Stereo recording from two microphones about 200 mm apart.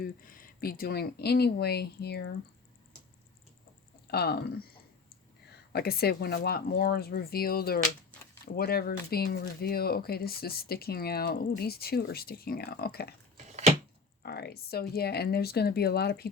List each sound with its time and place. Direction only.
0.0 s speech: 45° left (ahead or behind)
4.1 s speech: 50° left (ahead or behind)
5.7 s speech: 50° left (ahead or behind)
13.3 s a sound: 35° right (ahead or behind)
14.2 s speech: 50° left (ahead or behind)